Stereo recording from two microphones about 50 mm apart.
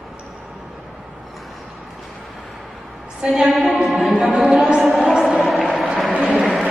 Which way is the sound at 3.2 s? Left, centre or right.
Centre.